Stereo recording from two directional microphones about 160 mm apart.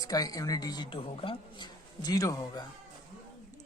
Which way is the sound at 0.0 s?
25° left (ahead or behind).